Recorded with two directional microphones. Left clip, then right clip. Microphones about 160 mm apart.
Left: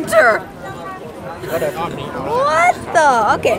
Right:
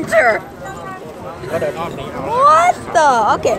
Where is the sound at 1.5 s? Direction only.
30° left (ahead or behind).